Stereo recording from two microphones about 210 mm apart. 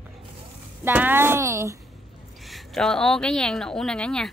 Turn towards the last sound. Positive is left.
turn(degrees=5)  # may be behind; listen again after turning